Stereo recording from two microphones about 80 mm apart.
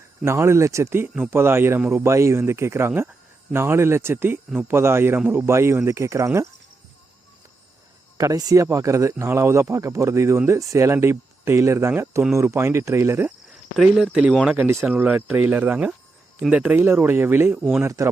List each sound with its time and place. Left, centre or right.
0.3 s speech: right
1.1 s speech: centre
1.4 s speech: right
8.2 s speech: right
13.9 s speech: centre
16.7 s speech: right
17.8 s speech: right